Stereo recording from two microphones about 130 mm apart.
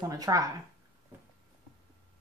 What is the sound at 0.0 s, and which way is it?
Speech, 25° right (ahead or behind).